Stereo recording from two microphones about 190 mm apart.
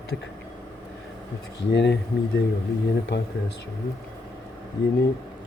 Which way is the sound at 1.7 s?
65° left (ahead or behind).